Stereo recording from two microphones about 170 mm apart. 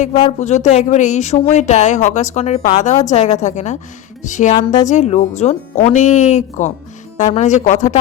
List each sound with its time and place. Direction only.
0.3 s speech: 40° left (ahead or behind)